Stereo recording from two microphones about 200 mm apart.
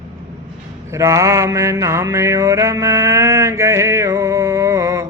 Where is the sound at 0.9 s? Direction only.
15° right (ahead or behind).